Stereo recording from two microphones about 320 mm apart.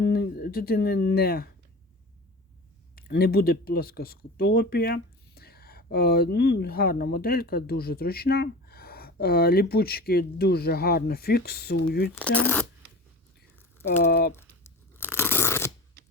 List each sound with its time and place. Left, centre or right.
0.0 s speech: left
2.9 s speech: left
12.1 s speech: centre
14.0 s speech: left
14.3 s tearing: centre